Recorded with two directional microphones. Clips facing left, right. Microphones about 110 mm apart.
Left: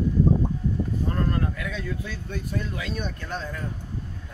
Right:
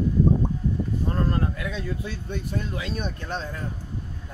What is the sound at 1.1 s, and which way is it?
Speech, 25° right (ahead or behind).